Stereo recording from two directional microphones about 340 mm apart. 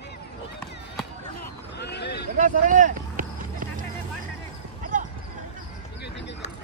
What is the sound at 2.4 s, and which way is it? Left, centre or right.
Clip-clop, right.